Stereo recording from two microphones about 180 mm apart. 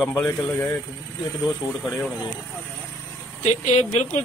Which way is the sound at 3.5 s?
40° left (ahead or behind).